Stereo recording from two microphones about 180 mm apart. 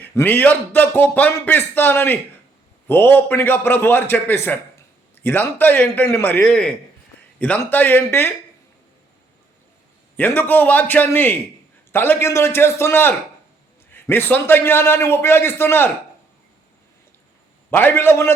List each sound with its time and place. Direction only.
0.0 s a man's voice: 10° left (ahead or behind)
10.2 s a man's voice: 10° left (ahead or behind)
17.7 s a man's voice: 10° left (ahead or behind)